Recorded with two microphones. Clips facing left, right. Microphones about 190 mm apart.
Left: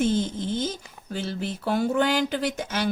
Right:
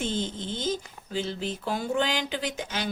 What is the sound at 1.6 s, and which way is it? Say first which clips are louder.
Speech: left 5 dB; 55° left (ahead or behind).